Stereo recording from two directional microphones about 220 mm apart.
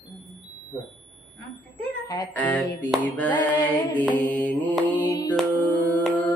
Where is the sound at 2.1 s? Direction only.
10° left (ahead or behind).